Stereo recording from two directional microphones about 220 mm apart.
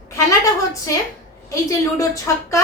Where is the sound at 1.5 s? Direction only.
15° left (ahead or behind).